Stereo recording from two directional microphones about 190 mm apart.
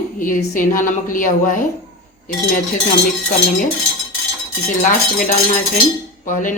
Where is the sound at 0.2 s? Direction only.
45° left (ahead or behind).